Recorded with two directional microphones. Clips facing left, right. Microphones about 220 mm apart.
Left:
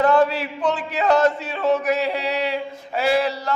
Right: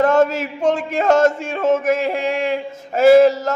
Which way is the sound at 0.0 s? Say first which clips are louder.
Right 2 dB; 45° right (ahead or behind).